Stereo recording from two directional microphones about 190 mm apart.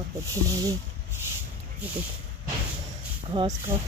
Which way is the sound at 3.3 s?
25° right (ahead or behind).